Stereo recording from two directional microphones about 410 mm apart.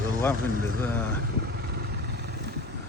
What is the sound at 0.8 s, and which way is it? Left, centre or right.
Speech, centre.